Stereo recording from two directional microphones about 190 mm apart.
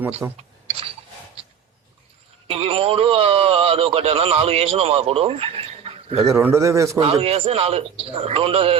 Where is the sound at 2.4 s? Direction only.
30° right (ahead or behind).